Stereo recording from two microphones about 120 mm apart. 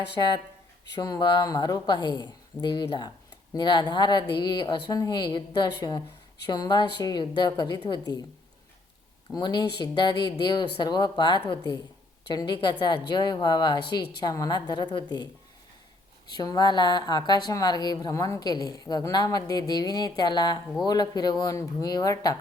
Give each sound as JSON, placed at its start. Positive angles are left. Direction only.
{"t": 0.2, "sound": "a woman's voice", "side_deg": 40}
{"t": 9.3, "sound": "a woman's voice", "side_deg": 35}
{"t": 16.3, "sound": "a woman's voice", "side_deg": 35}